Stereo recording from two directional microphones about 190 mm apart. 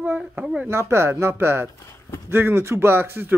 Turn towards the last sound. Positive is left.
turn(degrees=-10)  # may be behind; listen again after turning